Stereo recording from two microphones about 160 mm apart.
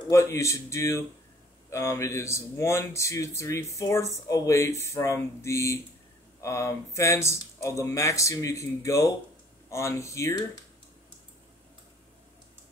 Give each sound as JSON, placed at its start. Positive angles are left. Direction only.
{"t": 0.1, "sound": "speech", "side_deg": 20}